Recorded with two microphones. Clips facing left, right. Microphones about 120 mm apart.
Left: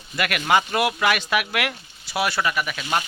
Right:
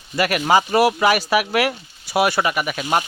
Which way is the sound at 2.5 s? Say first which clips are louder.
Right 4 dB; 45° right (ahead or behind).